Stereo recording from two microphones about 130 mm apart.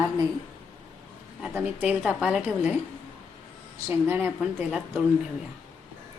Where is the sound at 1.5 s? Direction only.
10° right (ahead or behind).